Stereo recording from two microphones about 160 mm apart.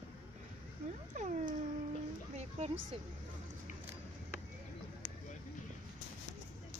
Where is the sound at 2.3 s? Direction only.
40° right (ahead or behind).